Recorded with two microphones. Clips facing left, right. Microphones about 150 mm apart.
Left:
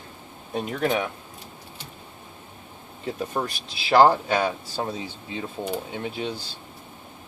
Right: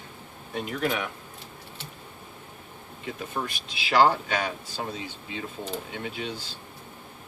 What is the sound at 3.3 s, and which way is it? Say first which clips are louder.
Speech: left 4 dB; 35° left (ahead or behind).